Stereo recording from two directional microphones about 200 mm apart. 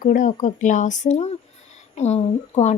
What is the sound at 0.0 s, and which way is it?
A woman's voice, 40° left (ahead or behind).